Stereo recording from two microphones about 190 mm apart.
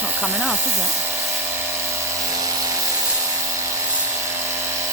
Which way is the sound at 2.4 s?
20° right (ahead or behind).